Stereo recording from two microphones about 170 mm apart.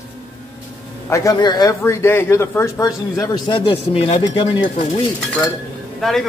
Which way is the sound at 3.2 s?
25° left (ahead or behind).